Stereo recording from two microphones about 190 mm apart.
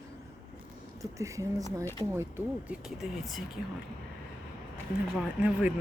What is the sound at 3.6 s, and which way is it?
Speech, 45° left (ahead or behind).